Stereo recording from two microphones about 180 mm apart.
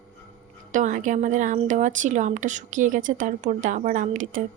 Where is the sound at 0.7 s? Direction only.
45° right (ahead or behind).